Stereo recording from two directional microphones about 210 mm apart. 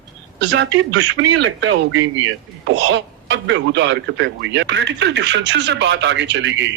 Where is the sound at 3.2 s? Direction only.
55° right (ahead or behind).